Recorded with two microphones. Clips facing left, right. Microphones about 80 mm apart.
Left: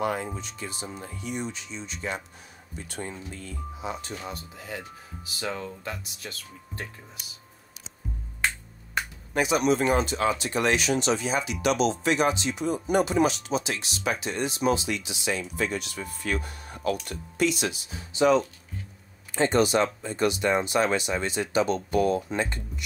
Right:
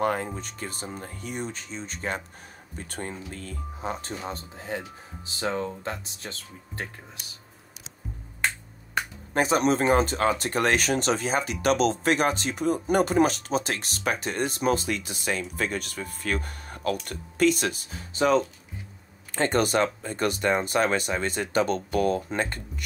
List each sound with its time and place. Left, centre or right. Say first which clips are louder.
0.0 s speech: right 2 dB; right
9.3 s speech: right 1 dB; right